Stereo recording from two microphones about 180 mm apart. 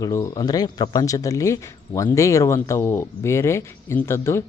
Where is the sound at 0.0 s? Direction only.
20° left (ahead or behind).